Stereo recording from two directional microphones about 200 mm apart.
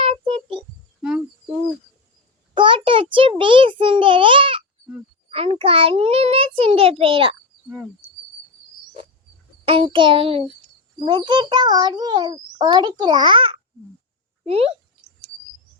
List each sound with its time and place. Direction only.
0.0 s a sound: 30° right (ahead or behind)
2.6 s a child's voice: 25° right (ahead or behind)
7.7 s speech: centre (ahead or behind)
9.6 s a child's voice: 25° right (ahead or behind)